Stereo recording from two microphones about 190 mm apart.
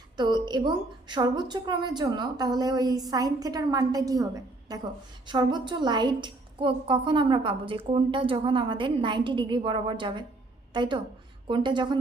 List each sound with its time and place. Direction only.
0.2 s a woman's voice: 25° right (ahead or behind)